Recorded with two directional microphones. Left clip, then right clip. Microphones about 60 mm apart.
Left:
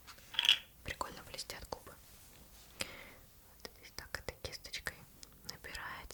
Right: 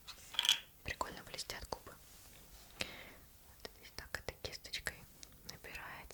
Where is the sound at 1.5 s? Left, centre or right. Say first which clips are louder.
Even; right.